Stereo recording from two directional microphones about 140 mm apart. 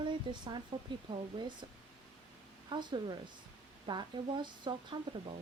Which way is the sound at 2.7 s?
35° right (ahead or behind).